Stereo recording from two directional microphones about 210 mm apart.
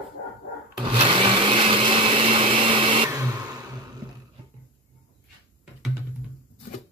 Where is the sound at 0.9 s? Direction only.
25° right (ahead or behind).